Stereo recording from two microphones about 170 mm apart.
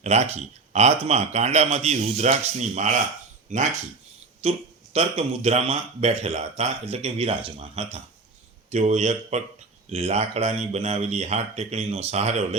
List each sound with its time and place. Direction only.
0.0 s speech: 40° right (ahead or behind)